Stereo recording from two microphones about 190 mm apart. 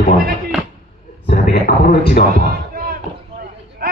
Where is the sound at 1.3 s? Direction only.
45° left (ahead or behind).